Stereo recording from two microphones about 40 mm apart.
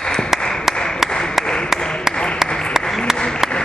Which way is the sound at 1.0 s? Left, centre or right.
Centre.